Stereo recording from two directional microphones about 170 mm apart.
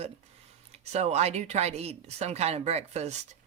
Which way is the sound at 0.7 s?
40° right (ahead or behind).